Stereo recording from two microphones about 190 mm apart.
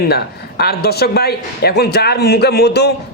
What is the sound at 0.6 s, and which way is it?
A man's voice, 55° left (ahead or behind).